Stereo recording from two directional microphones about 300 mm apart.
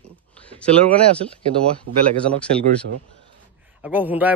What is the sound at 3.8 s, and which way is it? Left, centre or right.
Speech, centre.